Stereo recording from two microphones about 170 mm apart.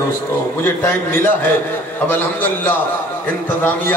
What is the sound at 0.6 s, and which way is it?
Mantra, 15° left (ahead or behind).